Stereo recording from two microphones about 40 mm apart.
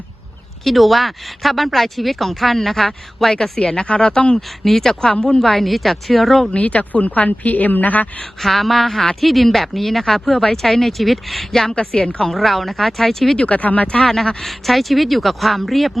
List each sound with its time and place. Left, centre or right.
0.6 s speech: centre; by 4.4 s left
4.4 s speech: centre
6.5 s speech: left
8.2 s speech: centre
11.7 s speech: left
12.2 s speech: centre
13.3 s speech: left
14.0 s speech: centre